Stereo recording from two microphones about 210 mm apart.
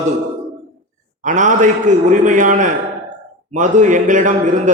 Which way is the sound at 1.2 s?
35° right (ahead or behind).